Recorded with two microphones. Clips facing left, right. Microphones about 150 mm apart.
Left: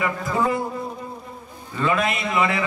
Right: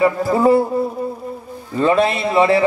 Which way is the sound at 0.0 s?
35° right (ahead or behind).